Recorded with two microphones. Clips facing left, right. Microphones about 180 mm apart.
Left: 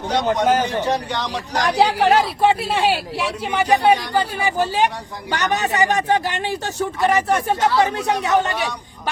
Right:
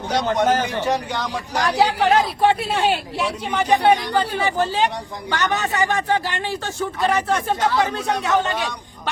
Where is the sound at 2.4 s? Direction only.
Centre (ahead or behind).